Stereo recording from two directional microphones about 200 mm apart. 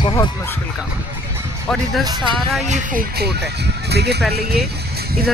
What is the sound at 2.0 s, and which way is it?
Speech, 20° right (ahead or behind).